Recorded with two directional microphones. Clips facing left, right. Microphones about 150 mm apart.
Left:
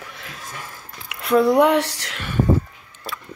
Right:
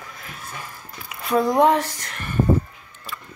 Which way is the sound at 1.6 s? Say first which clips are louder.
Left 1 dB; 75° left (ahead or behind).